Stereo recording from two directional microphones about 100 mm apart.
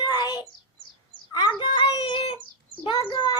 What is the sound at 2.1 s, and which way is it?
Bird, 55° left (ahead or behind).